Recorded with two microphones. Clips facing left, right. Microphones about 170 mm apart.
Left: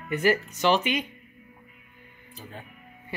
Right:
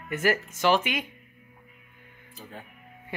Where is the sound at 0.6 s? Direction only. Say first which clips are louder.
Left 1 dB; 10° right (ahead or behind).